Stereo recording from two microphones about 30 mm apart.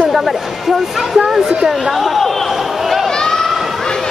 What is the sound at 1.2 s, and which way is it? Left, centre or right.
Speech, right.